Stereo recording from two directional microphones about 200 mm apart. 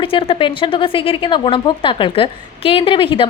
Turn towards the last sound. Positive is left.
turn(degrees=25)  # may be behind; listen again after turning